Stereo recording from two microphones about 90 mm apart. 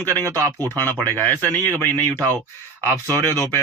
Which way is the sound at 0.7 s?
40° right (ahead or behind).